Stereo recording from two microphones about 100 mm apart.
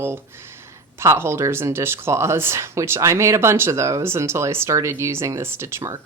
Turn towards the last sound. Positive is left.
turn(degrees=-30)  # may be behind; listen again after turning